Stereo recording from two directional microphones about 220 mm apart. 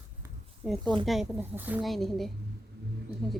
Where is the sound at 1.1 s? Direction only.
5° right (ahead or behind).